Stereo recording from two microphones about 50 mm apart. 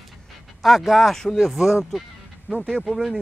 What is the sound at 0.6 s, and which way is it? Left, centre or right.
Speech, centre.